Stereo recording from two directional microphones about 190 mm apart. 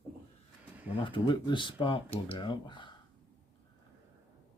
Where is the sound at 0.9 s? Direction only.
25° left (ahead or behind).